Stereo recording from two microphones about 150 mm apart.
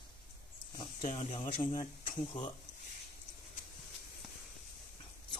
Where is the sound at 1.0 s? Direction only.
45° left (ahead or behind).